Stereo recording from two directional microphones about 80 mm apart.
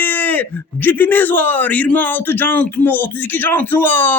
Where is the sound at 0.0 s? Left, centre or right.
Left.